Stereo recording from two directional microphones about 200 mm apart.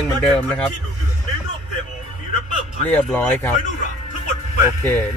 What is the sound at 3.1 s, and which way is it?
Speech, 10° left (ahead or behind).